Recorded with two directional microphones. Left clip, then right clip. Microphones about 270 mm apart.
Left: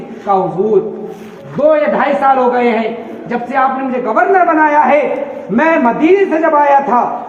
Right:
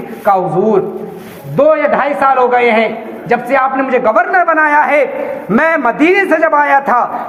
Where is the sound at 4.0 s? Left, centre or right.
Right.